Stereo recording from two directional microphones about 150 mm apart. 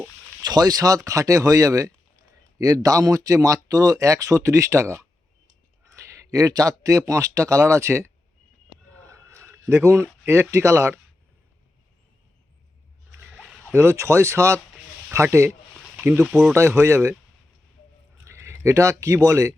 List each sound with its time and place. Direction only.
0.4 s speech: 25° right (ahead or behind)
9.0 s a sound: 20° right (ahead or behind)
10.2 s speech: 15° right (ahead or behind)
13.3 s a sound: centre (ahead or behind)
13.7 s speech: 20° right (ahead or behind); by 16.6 s centre (ahead or behind)
16.6 s speech: 20° right (ahead or behind)
18.3 s speech: 20° right (ahead or behind)